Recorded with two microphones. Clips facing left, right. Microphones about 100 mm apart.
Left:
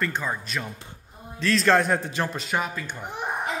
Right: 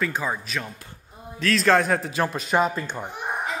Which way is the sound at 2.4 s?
25° right (ahead or behind).